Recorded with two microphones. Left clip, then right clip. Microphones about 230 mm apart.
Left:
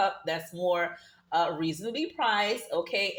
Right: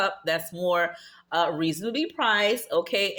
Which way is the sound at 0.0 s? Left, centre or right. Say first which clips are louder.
Right 3 dB; right.